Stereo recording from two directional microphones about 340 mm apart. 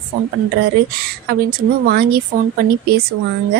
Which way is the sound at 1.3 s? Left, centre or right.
Right.